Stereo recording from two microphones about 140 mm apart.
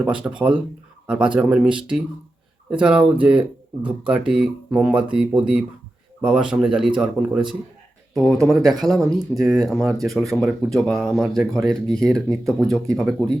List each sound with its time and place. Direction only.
0.0 s speech: 10° right (ahead or behind)
11.9 s speech: 25° right (ahead or behind)
12.1 s speech: centre (ahead or behind)